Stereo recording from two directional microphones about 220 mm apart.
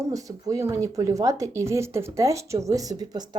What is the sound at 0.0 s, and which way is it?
A woman's voice, 15° right (ahead or behind).